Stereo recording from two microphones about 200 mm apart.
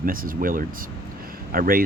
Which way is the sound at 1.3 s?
45° right (ahead or behind).